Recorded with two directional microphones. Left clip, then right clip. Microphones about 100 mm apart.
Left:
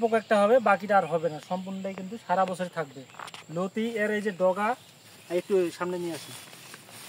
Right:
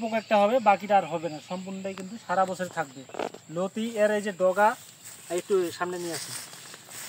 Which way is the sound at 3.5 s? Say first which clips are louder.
Left 2 dB; 15° left (ahead or behind).